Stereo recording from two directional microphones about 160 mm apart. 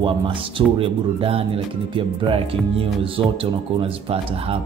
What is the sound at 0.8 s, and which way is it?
Speech, 35° right (ahead or behind).